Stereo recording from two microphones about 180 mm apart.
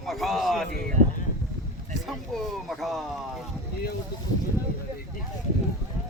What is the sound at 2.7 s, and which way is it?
Speech, centre (ahead or behind).